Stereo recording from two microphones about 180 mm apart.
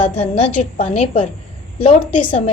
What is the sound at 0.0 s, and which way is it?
A woman's voice, 40° left (ahead or behind).